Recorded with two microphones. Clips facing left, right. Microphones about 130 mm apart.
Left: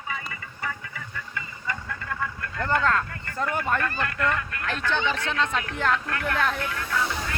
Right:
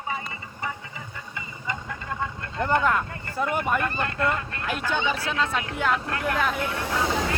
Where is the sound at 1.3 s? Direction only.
20° right (ahead or behind).